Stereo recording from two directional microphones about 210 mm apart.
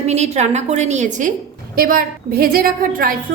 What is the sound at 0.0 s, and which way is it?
A woman's voice, 30° right (ahead or behind).